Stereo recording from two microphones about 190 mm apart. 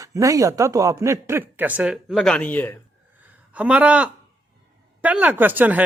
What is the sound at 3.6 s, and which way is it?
Speech, 5° right (ahead or behind).